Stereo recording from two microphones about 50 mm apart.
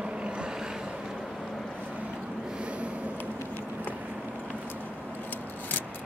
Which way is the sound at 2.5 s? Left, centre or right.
Right.